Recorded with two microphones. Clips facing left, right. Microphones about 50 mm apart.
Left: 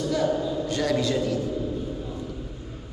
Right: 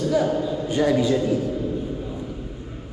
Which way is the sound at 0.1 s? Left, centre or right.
Centre.